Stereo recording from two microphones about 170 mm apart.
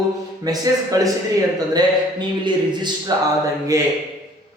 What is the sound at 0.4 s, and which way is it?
Speech, 20° right (ahead or behind).